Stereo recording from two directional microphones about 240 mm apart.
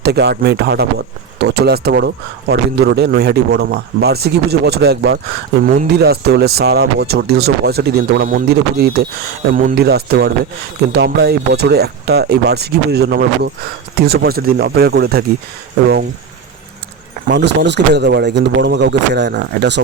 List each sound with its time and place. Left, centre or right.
0.0 s a man's voice: right
17.2 s a man's voice: right